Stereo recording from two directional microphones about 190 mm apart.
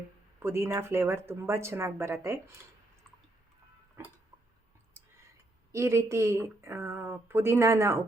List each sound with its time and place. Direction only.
0.3 s speech: 10° right (ahead or behind)
4.0 s music: 15° right (ahead or behind)
5.7 s speech: 15° right (ahead or behind)